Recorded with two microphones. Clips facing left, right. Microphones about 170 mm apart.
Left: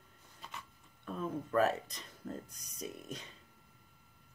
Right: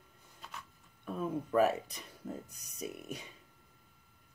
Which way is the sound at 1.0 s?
10° right (ahead or behind).